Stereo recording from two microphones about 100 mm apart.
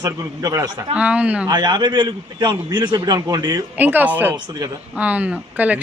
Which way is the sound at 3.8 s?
20° right (ahead or behind).